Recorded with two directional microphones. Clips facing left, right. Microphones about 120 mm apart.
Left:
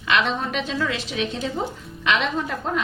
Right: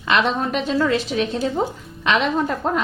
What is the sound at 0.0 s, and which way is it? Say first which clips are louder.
A woman's voice: right 3 dB; 40° right (ahead or behind).